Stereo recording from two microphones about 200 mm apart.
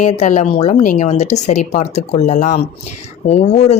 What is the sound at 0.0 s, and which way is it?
Speech, 35° left (ahead or behind).